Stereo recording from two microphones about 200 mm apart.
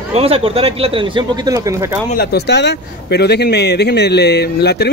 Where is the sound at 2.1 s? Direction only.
55° left (ahead or behind).